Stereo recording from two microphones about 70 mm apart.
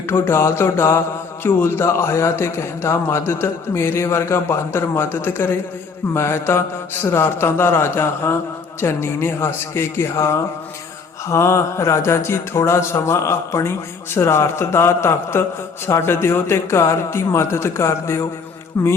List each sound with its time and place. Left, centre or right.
0.1 s speech: left